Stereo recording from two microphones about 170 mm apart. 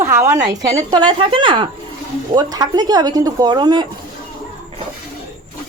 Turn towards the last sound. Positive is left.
turn(degrees=-25)  # may be behind; listen again after turning